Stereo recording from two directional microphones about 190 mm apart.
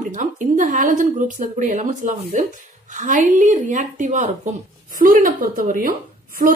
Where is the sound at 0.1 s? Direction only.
40° right (ahead or behind).